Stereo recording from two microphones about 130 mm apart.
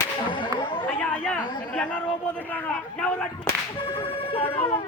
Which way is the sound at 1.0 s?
10° left (ahead or behind).